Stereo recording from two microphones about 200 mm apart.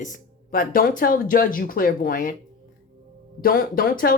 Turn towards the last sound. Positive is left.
turn(degrees=45)  # may be behind; listen again after turning